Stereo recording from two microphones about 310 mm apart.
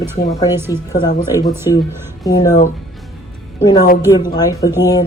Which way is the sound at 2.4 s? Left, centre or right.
Centre.